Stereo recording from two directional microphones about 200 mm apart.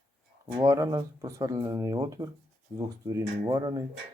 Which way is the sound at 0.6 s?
15° right (ahead or behind).